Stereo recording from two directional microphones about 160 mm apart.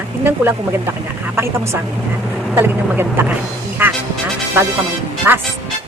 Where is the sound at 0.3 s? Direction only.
15° right (ahead or behind).